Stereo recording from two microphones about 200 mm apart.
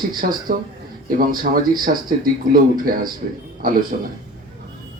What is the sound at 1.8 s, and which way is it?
Speech, 45° right (ahead or behind).